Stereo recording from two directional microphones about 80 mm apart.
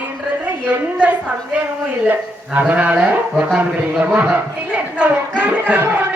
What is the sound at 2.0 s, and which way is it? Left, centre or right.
Speech, right.